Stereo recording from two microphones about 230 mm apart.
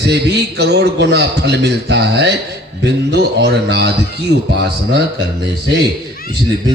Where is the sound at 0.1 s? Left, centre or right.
Right.